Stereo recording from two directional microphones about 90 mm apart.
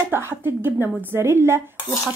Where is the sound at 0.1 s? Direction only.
25° right (ahead or behind).